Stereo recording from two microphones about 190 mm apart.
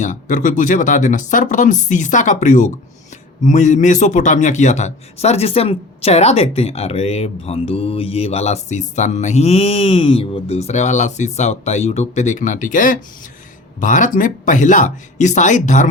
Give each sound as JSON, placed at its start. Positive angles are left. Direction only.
{"t": 0.0, "sound": "a man's voice", "side_deg": 40}